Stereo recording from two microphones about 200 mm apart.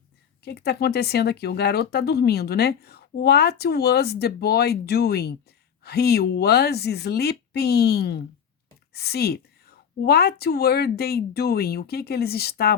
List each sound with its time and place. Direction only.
0.4 s speech: 55° left (ahead or behind)